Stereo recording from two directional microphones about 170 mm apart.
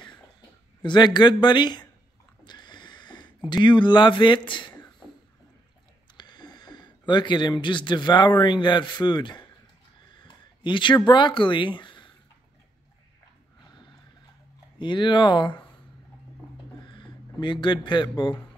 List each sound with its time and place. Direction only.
0.8 s a man's voice: 25° left (ahead or behind)
2.4 s a sound: 25° left (ahead or behind)
3.6 s a man's voice: 25° left (ahead or behind)
4.5 s a sound: 25° left (ahead or behind)
6.1 s speech: 25° left (ahead or behind)
10.0 s a sound: 25° left (ahead or behind)
11.1 s speech: 30° left (ahead or behind)
14.8 s a man's voice: 25° left (ahead or behind)
16.8 s a man's voice: 25° left (ahead or behind)